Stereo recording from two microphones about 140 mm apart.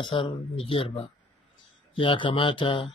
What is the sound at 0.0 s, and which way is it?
Speech, 40° left (ahead or behind).